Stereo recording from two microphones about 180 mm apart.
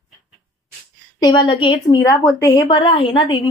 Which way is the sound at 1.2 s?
25° left (ahead or behind).